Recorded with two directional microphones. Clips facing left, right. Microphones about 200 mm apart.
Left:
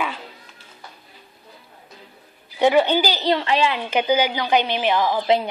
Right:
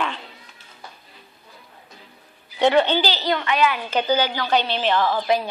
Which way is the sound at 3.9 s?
15° left (ahead or behind).